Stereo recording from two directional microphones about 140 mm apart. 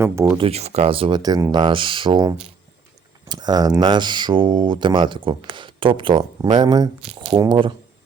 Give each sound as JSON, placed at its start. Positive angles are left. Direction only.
{"t": 0.0, "sound": "speech", "side_deg": -20}
{"t": 0.3, "sound": "speech", "side_deg": -45}